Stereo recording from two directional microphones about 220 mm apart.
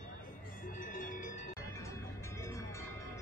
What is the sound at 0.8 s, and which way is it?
Wind chime, 35° left (ahead or behind).